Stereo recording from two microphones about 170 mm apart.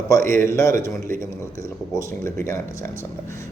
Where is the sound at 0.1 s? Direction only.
15° left (ahead or behind).